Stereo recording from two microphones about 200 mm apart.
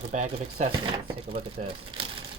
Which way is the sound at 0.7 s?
25° right (ahead or behind).